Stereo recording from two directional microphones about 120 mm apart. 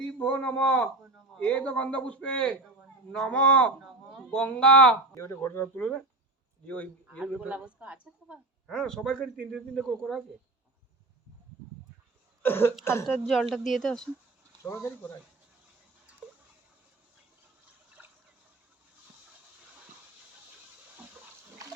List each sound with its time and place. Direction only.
0.0 s a man's voice: 10° left (ahead or behind)
5.1 s a man's voice: 25° left (ahead or behind)
7.4 s a woman's voice: 10° right (ahead or behind)
8.6 s speech: 5° left (ahead or behind)
12.4 s speech: 20° left (ahead or behind)
13.1 s speech: centre (ahead or behind)
14.6 s speech: 20° left (ahead or behind)